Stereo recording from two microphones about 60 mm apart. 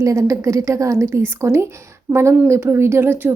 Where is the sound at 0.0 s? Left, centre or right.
Right.